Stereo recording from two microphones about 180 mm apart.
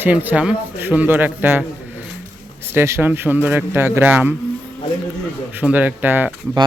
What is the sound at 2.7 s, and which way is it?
A man's voice, 15° right (ahead or behind).